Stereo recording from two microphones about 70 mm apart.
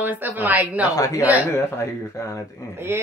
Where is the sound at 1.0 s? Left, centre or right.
Left.